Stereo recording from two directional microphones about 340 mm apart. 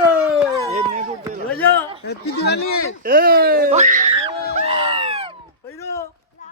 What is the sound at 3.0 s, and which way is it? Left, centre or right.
Speech, right.